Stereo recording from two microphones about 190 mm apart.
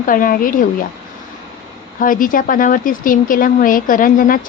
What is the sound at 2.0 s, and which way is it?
A woman's voice, 45° left (ahead or behind).